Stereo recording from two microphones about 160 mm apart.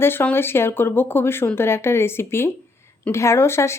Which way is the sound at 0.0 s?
15° left (ahead or behind).